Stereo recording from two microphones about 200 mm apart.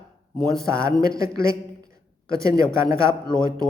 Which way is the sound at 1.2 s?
15° right (ahead or behind).